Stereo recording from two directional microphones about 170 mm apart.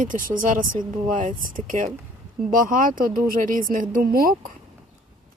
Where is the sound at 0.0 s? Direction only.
50° right (ahead or behind).